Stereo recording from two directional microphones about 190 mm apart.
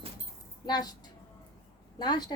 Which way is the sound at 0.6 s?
20° left (ahead or behind).